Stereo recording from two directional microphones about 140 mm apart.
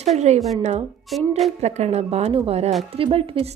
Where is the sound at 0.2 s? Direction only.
55° right (ahead or behind).